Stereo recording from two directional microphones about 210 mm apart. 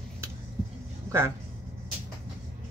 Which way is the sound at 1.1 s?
15° right (ahead or behind).